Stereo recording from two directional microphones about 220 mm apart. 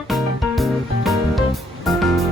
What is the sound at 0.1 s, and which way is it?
Music, centre (ahead or behind).